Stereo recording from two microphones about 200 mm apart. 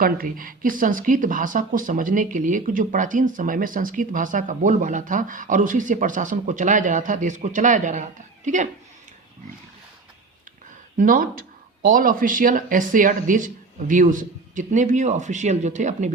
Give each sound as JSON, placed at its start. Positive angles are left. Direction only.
{"t": 0.0, "sound": "speech", "side_deg": -45}
{"t": 10.9, "sound": "speech", "side_deg": -40}